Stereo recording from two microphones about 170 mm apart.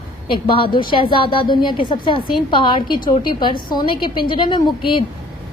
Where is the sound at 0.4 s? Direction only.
30° left (ahead or behind).